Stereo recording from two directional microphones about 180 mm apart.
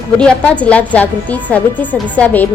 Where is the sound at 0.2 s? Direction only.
5° left (ahead or behind).